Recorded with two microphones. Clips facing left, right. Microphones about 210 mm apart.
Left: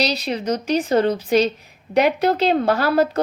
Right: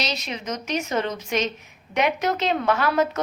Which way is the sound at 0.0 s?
35° left (ahead or behind).